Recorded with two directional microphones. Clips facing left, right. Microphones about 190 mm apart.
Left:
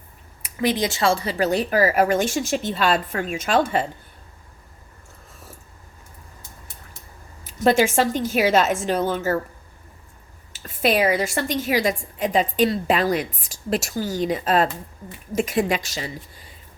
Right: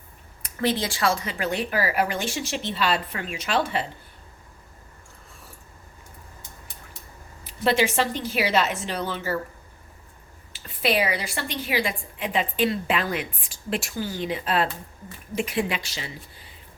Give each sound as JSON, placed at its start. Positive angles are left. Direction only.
{"t": 0.4, "sound": "speech", "side_deg": 15}
{"t": 7.4, "sound": "speech", "side_deg": 45}
{"t": 10.5, "sound": "a woman's voice", "side_deg": 45}